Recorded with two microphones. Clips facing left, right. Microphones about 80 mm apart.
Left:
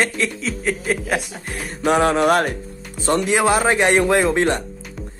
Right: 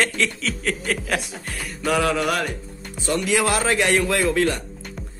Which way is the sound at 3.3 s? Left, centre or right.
Left.